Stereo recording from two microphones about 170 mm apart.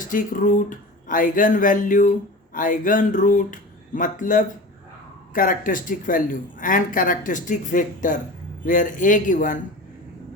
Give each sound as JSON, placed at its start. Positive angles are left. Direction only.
{"t": 0.0, "sound": "speech", "side_deg": 50}